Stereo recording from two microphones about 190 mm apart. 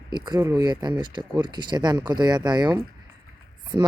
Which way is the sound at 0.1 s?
20° right (ahead or behind).